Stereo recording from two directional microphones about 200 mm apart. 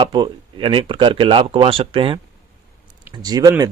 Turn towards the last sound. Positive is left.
turn(degrees=-20)  # may be behind; listen again after turning